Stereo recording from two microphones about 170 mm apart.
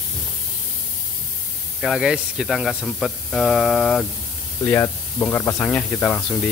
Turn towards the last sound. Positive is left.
turn(degrees=10)  # may be behind; listen again after turning